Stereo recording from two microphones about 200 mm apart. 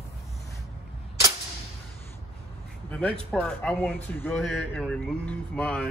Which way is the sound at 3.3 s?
5° left (ahead or behind).